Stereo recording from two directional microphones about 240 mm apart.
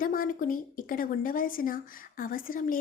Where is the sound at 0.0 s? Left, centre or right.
Left.